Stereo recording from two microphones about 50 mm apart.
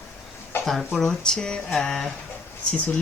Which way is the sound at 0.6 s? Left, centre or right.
Centre.